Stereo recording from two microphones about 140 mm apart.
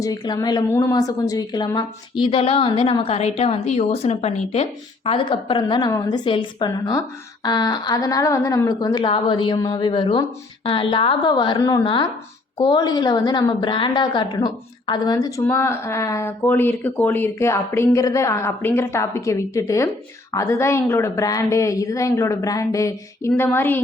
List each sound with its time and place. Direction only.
0.0 s a woman's voice: 25° left (ahead or behind)